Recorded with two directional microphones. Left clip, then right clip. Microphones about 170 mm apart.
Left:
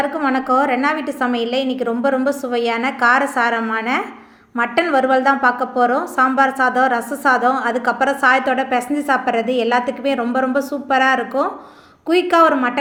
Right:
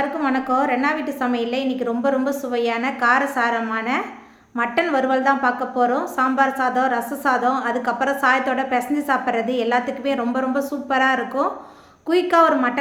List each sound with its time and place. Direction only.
0.2 s a woman's voice: 15° left (ahead or behind)